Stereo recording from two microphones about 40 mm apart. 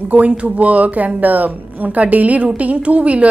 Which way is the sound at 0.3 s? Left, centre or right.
Right.